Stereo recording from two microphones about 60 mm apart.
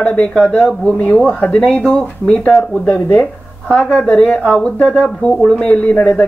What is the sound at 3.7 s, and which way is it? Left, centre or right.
Speech, centre.